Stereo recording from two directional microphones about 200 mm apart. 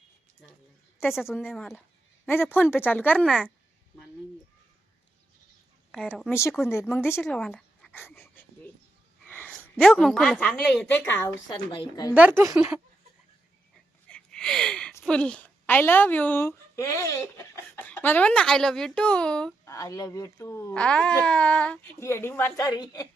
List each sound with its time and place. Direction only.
1.1 s a woman's voice: centre (ahead or behind)
5.9 s a woman's voice: centre (ahead or behind)
6.7 s speech: 10° left (ahead or behind)
9.2 s a sound: 10° left (ahead or behind)
9.6 s a woman's voice: centre (ahead or behind)
11.4 s speech: 25° left (ahead or behind)
12.5 s a woman's voice: 5° right (ahead or behind)
14.1 s a woman's voice: 5° left (ahead or behind)
19.7 s speech: 15° left (ahead or behind)